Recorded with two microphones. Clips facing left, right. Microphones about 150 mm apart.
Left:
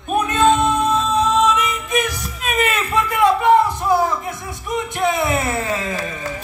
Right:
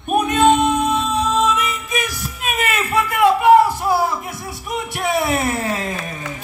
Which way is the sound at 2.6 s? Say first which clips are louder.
Right 3 dB; 10° right (ahead or behind).